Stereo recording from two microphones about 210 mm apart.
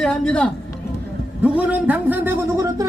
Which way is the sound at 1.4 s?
5° right (ahead or behind).